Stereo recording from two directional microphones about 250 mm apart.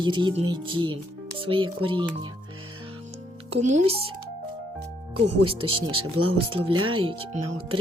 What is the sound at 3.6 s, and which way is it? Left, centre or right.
Speech, right.